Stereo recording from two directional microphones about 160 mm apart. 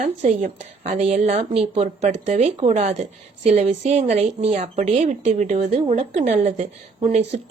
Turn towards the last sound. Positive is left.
turn(degrees=-40)  # may be behind; listen again after turning